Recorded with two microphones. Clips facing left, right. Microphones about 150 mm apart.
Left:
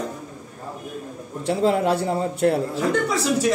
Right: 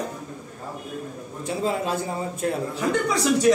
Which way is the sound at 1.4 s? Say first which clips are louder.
Left 6 dB; 70° left (ahead or behind).